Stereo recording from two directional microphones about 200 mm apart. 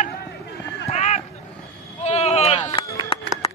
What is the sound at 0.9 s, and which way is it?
Run, 35° left (ahead or behind).